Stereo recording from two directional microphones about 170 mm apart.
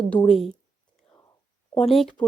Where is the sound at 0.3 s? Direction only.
Centre (ahead or behind).